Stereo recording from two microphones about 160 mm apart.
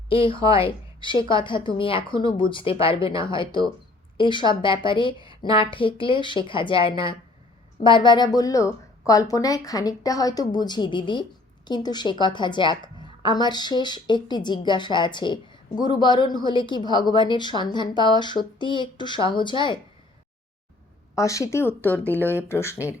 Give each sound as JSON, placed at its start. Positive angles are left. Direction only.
{"t": 0.1, "sound": "a woman's voice", "side_deg": 35}
{"t": 21.2, "sound": "speech", "side_deg": 20}